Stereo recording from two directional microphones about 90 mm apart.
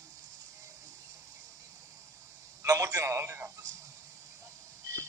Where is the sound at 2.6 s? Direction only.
35° right (ahead or behind).